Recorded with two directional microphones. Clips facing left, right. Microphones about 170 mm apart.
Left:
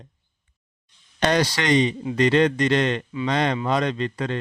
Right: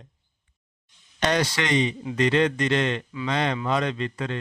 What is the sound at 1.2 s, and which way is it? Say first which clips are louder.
A man's voice: left 3 dB; 35° left (ahead or behind).